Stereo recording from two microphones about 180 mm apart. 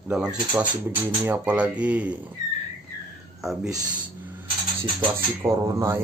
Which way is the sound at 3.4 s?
Centre (ahead or behind).